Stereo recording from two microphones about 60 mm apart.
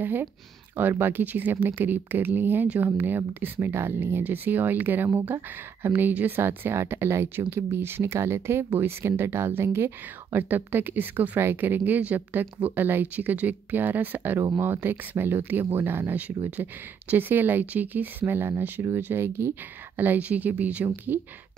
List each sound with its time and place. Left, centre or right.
0.0 s a woman's voice: right
10.5 s a woman's voice: right
20.0 s speech: right